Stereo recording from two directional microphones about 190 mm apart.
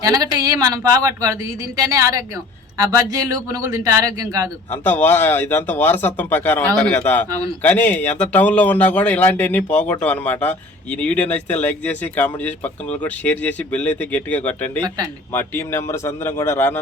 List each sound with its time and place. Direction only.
0.0 s a man's voice: 20° right (ahead or behind)
4.7 s speech: 10° left (ahead or behind)
7.3 s speech: 20° right (ahead or behind)
7.6 s speech: 10° left (ahead or behind)